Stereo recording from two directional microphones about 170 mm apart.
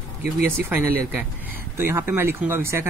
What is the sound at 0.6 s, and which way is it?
Speech, 10° right (ahead or behind).